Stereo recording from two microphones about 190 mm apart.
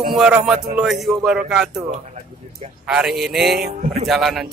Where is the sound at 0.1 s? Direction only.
5° right (ahead or behind).